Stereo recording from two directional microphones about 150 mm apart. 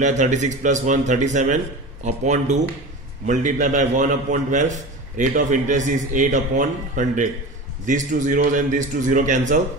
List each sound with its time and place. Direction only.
0.0 s a man's voice: 50° right (ahead or behind)